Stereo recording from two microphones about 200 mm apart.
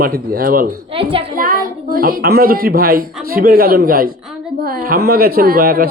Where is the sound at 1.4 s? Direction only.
45° right (ahead or behind).